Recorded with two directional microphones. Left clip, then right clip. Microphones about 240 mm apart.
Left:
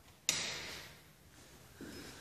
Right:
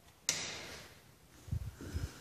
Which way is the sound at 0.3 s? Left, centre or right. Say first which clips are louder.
Left 1 dB; right.